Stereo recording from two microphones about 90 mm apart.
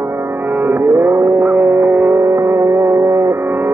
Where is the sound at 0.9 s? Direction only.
40° right (ahead or behind).